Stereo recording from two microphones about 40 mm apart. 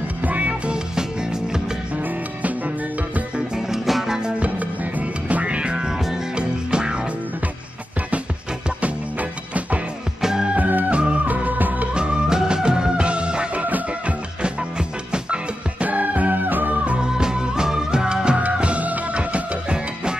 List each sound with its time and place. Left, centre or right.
0.2 s music: right
3.5 s music: centre
5.3 s music: right
10.2 s music: centre
10.9 s music: right
11.4 s music of bollywood: right
11.9 s music: right
13.7 s music: right
15.8 s music: right
17.0 s music: centre